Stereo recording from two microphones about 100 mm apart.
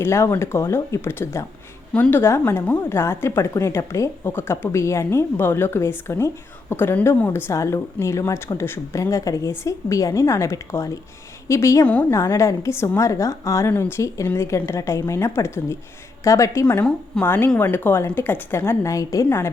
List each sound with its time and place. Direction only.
0.0 s a woman's voice: 25° left (ahead or behind)